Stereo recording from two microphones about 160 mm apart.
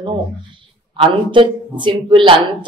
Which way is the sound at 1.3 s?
30° right (ahead or behind).